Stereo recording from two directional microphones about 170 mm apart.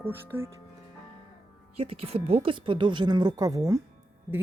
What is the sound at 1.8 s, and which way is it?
A woman's voice, 35° right (ahead or behind).